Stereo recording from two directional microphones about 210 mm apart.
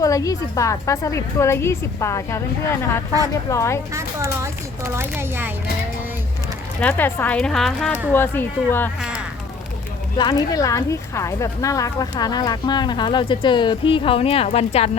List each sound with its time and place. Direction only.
0.0 s a woman's voice: 15° left (ahead or behind)
4.9 s speech: 10° right (ahead or behind)
6.7 s a woman's voice: 10° left (ahead or behind)
10.2 s a woman's voice: 20° left (ahead or behind)